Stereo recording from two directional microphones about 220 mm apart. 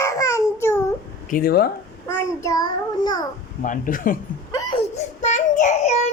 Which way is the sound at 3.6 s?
35° left (ahead or behind).